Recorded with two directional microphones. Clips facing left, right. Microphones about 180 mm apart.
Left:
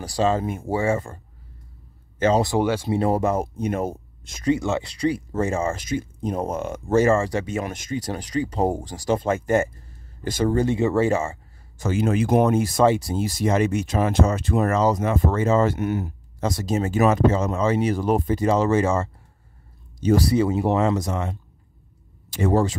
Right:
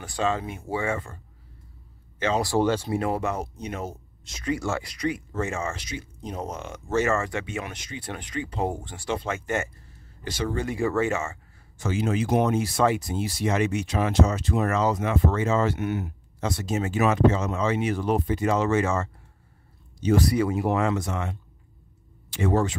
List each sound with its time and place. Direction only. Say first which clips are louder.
0.0 s speech: left 5 dB; 35° left (ahead or behind)
0.5 s speech: left 6 dB; 45° left (ahead or behind)
2.3 s speech: right 2 dB; 20° left (ahead or behind)
2.9 s speech: left 5 dB; 35° left (ahead or behind); by 4.5 s 50° left (ahead or behind)
4.5 s speech: left 6 dB; 20° left (ahead or behind); by 7.1 s 50° left (ahead or behind)
7.1 s speech: left 6 dB; 35° left (ahead or behind)
10.2 s speech: left 7 dB; 50° left (ahead or behind)
10.6 s speech: left 3 dB; 25° left (ahead or behind)
11.8 s speech: left 4 dB; 50° left (ahead or behind)
12.8 s speech: left 5 dB; 30° left (ahead or behind)
20.2 s speech: left 3 dB; 25° left (ahead or behind)